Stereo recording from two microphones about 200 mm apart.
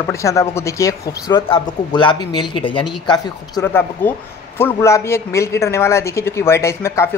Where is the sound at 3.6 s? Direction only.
10° left (ahead or behind).